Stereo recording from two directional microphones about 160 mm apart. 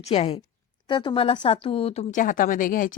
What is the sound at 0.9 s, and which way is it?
Speech, 30° left (ahead or behind).